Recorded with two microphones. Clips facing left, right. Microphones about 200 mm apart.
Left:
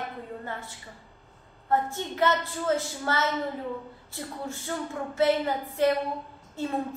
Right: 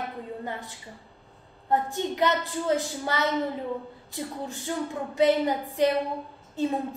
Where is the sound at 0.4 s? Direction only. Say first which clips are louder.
Right 2 dB; 15° right (ahead or behind).